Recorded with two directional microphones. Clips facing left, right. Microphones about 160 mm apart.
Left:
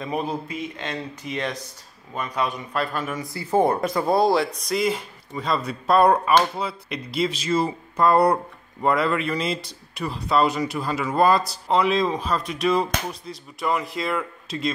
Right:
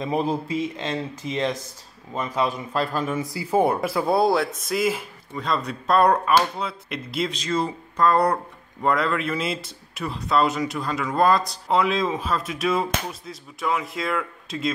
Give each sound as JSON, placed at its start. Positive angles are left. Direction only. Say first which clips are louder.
{"t": 0.0, "sound": "a man's voice", "louder": "right 3 dB", "side_deg": -25}
{"t": 3.3, "sound": "speech", "louder": "left 1 dB", "side_deg": -10}